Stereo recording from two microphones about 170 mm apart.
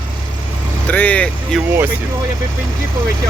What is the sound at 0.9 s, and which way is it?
Speech, 10° left (ahead or behind).